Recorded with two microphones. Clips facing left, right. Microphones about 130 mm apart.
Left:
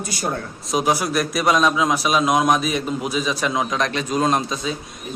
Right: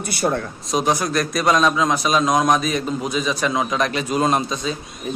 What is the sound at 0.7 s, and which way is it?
A man's voice, 5° left (ahead or behind).